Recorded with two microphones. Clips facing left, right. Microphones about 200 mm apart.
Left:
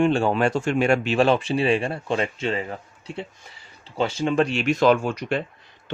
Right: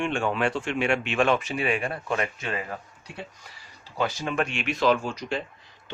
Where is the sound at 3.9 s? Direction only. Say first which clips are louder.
Left 6 dB; 25° left (ahead or behind); by 5.4 s 55° left (ahead or behind).